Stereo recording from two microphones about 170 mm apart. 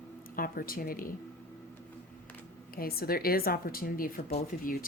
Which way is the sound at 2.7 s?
60° left (ahead or behind).